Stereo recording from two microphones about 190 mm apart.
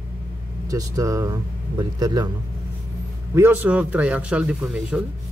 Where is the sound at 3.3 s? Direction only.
10° right (ahead or behind).